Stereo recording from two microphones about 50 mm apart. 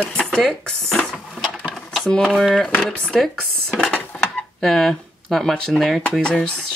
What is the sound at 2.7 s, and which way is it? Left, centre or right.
Speech, left.